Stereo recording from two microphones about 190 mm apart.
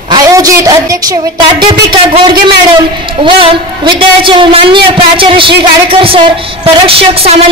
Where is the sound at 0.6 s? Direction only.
20° right (ahead or behind).